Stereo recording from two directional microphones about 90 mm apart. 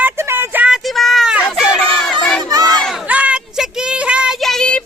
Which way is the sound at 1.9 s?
5° left (ahead or behind).